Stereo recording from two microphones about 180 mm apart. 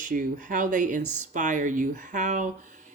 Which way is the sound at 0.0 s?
45° right (ahead or behind).